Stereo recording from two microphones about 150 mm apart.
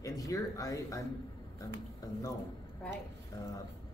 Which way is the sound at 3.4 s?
25° left (ahead or behind).